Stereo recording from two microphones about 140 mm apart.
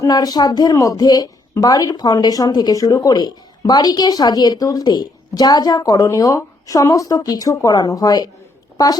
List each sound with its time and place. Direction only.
0.0 s a woman's voice: 25° left (ahead or behind)